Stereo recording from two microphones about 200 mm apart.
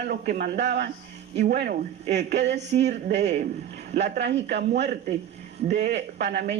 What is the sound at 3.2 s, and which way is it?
Speech, 35° right (ahead or behind).